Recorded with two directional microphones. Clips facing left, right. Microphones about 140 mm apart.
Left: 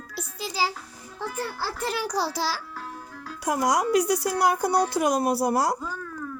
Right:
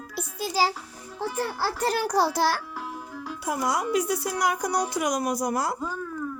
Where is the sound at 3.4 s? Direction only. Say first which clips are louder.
Left 3 dB; 90° left.